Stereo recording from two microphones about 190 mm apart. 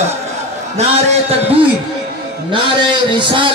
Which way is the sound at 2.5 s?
25° right (ahead or behind).